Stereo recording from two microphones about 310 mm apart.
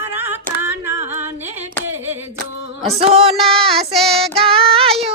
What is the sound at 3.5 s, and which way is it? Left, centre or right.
Child singing, centre.